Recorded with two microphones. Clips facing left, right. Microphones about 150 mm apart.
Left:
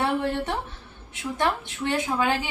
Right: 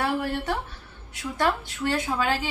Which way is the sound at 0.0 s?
25° left (ahead or behind).